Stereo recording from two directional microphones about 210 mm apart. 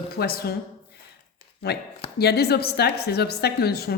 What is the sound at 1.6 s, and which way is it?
A woman's voice, 50° left (ahead or behind).